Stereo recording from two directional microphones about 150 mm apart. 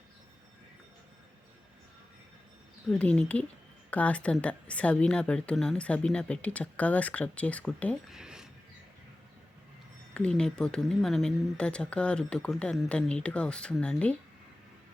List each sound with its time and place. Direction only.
2.9 s speech: 5° left (ahead or behind)
8.1 s a sound: 5° right (ahead or behind)
10.2 s speech: 5° left (ahead or behind)